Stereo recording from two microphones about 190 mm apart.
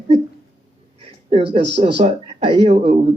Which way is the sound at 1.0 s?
30° right (ahead or behind).